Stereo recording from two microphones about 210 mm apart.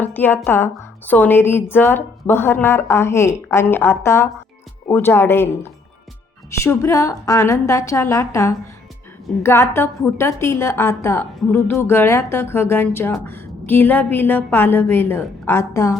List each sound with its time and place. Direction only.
0.0 s a woman's voice: 10° left (ahead or behind)